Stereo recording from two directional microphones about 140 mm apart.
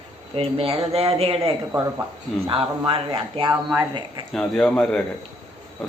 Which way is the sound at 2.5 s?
40° right (ahead or behind).